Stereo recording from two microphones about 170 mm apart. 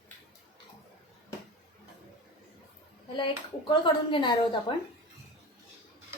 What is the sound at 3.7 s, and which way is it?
A woman's voice, 30° left (ahead or behind).